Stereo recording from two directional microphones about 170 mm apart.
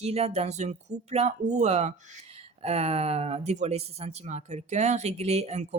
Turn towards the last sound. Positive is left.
turn(degrees=-40)  # may be behind; listen again after turning